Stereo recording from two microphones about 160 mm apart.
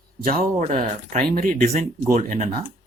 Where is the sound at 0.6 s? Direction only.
50° right (ahead or behind).